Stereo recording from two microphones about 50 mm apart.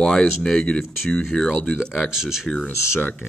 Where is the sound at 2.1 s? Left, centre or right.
Centre.